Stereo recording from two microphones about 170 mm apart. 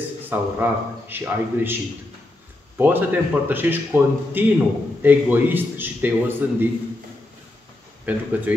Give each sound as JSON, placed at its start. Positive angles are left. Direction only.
{"t": 0.3, "sound": "a man's voice", "side_deg": -10}
{"t": 2.8, "sound": "a man's voice", "side_deg": -10}
{"t": 8.0, "sound": "a man's voice", "side_deg": -10}